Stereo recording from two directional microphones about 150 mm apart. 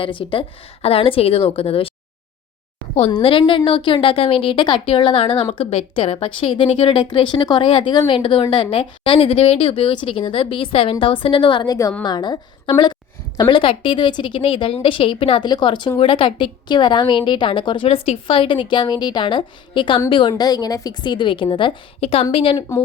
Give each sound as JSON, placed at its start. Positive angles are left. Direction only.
{"t": 0.0, "sound": "a woman's voice", "side_deg": 35}
{"t": 2.9, "sound": "a woman's voice", "side_deg": 40}